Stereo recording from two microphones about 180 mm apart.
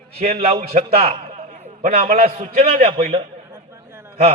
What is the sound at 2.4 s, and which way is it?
A man's voice, 35° right (ahead or behind).